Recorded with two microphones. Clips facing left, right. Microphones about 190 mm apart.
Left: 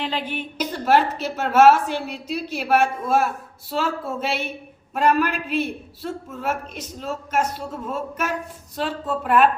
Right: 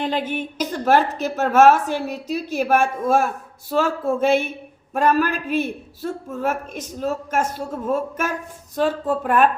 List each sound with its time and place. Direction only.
0.0 s a woman's voice: 45° right (ahead or behind)